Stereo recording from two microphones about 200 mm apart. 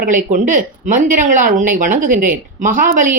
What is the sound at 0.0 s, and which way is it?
Speech, 40° right (ahead or behind).